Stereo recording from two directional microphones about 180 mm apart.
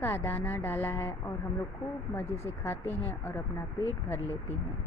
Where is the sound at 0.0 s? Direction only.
15° left (ahead or behind).